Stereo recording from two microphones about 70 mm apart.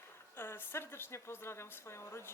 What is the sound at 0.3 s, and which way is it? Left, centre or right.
A woman's voice, left.